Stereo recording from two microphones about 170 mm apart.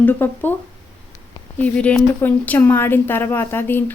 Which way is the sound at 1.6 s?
10° left (ahead or behind).